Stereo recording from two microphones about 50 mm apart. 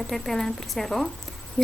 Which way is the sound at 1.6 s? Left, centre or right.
Left.